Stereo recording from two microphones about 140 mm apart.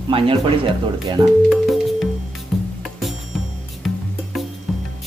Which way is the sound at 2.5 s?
Centre (ahead or behind).